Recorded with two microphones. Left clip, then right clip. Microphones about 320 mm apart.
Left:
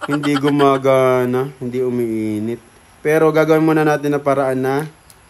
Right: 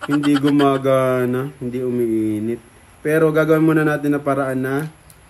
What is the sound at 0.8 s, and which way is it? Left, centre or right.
Speech, left.